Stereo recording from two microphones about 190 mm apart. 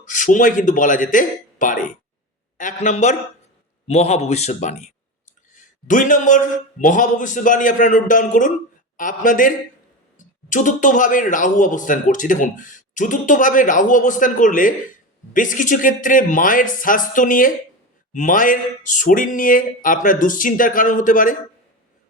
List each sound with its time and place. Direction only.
0.0 s speech: 40° left (ahead or behind)